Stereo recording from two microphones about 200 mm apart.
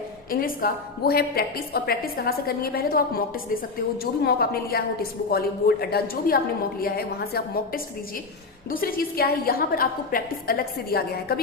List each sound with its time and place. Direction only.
0.3 s a woman's voice: 45° left (ahead or behind)